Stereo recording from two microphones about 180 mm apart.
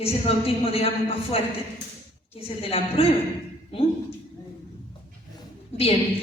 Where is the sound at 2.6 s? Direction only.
35° left (ahead or behind).